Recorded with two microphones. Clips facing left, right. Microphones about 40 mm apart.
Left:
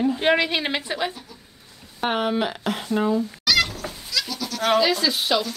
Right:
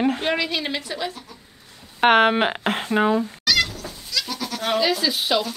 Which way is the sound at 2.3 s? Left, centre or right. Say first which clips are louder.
Right 3 dB; right.